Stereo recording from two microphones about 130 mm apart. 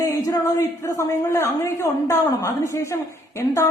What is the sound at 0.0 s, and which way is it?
A man's voice, 25° left (ahead or behind).